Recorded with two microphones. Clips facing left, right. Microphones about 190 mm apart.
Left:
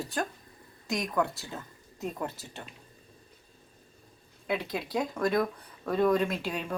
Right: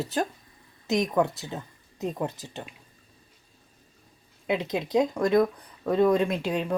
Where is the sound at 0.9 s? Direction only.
20° right (ahead or behind).